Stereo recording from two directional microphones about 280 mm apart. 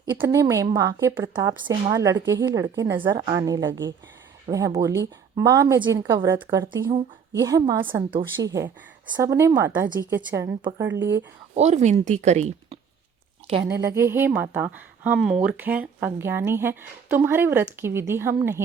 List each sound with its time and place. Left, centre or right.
0.0 s a woman's voice: centre
11.5 s speech: right
13.5 s a woman's voice: centre